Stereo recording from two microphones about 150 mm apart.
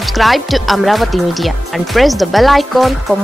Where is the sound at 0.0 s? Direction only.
Centre (ahead or behind).